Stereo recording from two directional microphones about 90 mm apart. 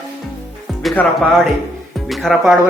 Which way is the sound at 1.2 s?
5° left (ahead or behind).